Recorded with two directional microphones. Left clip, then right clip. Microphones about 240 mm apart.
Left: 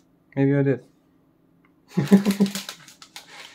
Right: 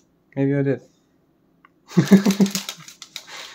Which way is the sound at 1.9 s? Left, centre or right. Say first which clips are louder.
Right 5 dB; right.